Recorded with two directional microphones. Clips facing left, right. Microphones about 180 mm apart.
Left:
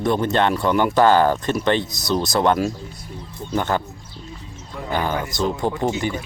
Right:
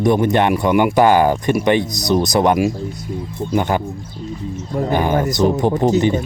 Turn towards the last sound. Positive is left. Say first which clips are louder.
# right 8 dB
turn(degrees=-20)  # may be behind; listen again after turning